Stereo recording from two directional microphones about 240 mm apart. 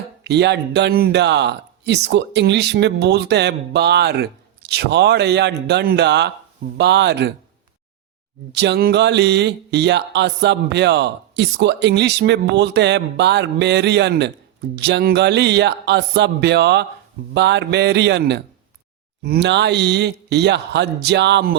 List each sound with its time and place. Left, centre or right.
0.3 s speech: right
8.5 s speech: right